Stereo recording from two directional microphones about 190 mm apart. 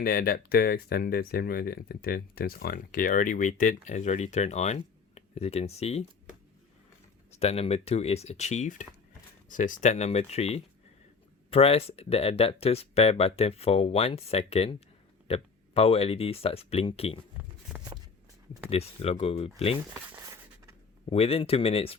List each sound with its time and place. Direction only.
0.0 s speech: 50° left (ahead or behind); by 6.1 s 35° left (ahead or behind)
7.3 s speech: 30° left (ahead or behind)
17.7 s a sound: 5° right (ahead or behind)
18.7 s speech: 30° left (ahead or behind)
21.1 s speech: 30° left (ahead or behind)